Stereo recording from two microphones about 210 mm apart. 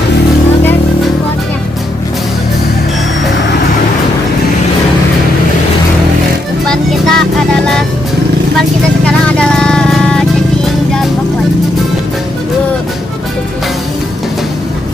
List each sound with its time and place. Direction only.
6.7 s music: centre (ahead or behind)
9.0 s music: 5° left (ahead or behind)